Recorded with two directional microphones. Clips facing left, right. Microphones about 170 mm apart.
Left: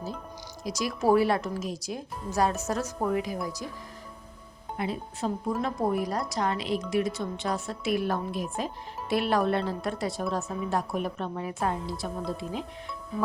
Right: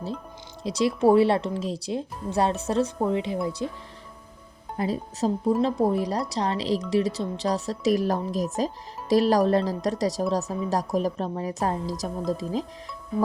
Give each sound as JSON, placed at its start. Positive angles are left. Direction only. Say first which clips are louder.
{"t": 0.6, "sound": "speech", "louder": "right 6 dB", "side_deg": -30}
{"t": 4.8, "sound": "a woman's voice", "louder": "right 5 dB", "side_deg": -35}